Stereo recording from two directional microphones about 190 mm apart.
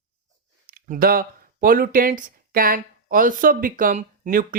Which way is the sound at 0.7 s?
50° right (ahead or behind).